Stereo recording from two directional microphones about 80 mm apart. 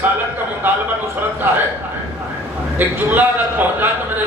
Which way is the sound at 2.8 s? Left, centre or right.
Right.